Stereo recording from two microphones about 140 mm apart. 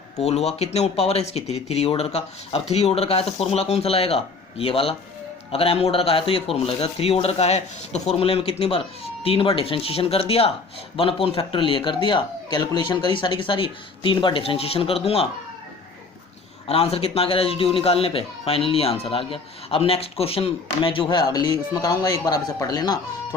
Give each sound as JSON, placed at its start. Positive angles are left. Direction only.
{"t": 0.2, "sound": "speech", "side_deg": 50}
{"t": 16.6, "sound": "speech", "side_deg": 45}